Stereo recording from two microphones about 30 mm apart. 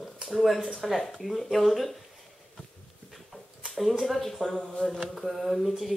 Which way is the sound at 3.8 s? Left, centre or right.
Centre.